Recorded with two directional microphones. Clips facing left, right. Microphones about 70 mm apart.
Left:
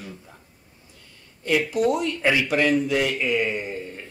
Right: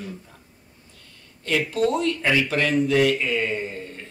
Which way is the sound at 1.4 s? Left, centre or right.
Centre.